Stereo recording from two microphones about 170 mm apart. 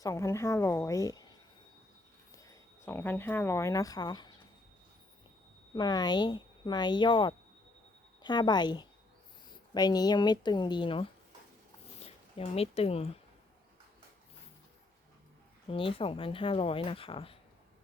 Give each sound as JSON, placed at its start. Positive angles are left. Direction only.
{"t": 0.0, "sound": "speech", "side_deg": 20}
{"t": 2.4, "sound": "speech", "side_deg": 15}
{"t": 5.7, "sound": "speech", "side_deg": 25}
{"t": 15.6, "sound": "speech", "side_deg": 30}